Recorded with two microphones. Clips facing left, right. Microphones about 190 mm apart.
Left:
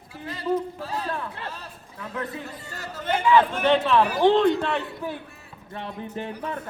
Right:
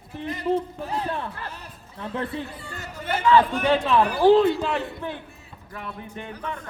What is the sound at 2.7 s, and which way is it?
Speech, 15° right (ahead or behind).